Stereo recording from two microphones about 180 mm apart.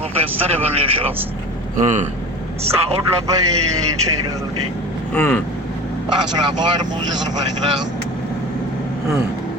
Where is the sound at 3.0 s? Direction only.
20° right (ahead or behind).